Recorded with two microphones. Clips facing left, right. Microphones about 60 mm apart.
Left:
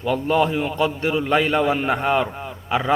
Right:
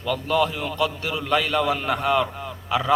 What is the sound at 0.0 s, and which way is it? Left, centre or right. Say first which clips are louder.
A man's voice: left 3 dB; left.